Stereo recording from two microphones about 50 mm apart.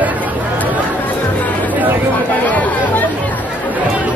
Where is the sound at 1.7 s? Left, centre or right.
Right.